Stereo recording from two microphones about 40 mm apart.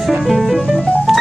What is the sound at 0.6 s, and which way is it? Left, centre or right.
Music, centre.